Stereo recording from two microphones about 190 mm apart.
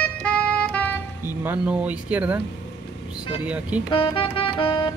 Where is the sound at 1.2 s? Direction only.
10° right (ahead or behind).